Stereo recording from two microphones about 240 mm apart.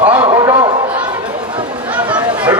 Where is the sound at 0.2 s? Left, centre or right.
Centre.